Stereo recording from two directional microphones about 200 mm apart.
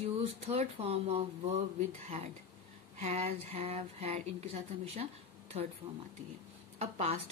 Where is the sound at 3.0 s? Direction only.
30° right (ahead or behind).